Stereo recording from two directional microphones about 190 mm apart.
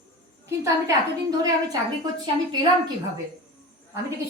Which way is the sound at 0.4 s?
15° right (ahead or behind).